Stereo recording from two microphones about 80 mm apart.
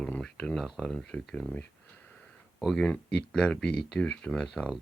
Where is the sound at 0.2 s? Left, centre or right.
Centre.